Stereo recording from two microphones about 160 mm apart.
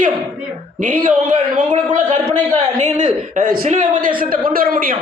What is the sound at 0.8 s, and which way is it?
A man's voice, 60° right (ahead or behind).